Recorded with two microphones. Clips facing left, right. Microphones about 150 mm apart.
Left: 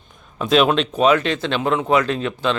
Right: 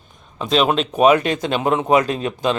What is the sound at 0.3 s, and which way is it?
Speech, centre (ahead or behind).